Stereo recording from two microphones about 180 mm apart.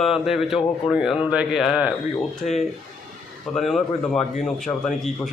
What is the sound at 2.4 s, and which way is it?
Speech, 45° left (ahead or behind).